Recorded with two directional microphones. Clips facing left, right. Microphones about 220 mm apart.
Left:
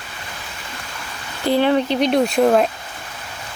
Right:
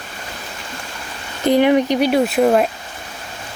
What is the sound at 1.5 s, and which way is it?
Speech, 15° right (ahead or behind).